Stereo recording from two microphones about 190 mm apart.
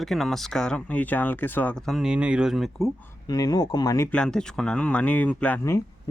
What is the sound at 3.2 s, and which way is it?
Speech, 20° left (ahead or behind).